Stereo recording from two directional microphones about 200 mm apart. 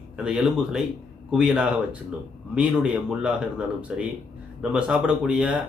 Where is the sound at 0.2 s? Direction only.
5° right (ahead or behind).